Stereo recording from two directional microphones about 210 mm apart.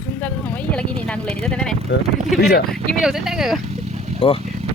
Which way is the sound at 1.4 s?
5° left (ahead or behind).